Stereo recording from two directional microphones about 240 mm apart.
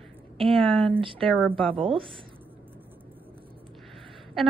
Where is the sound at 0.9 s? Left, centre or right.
Right.